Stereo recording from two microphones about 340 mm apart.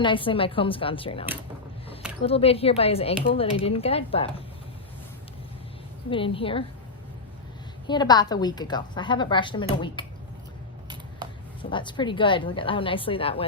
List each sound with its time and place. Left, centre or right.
0.0 s speech: centre
2.2 s speech: centre
6.1 s speech: centre
7.9 s speech: centre
11.7 s speech: centre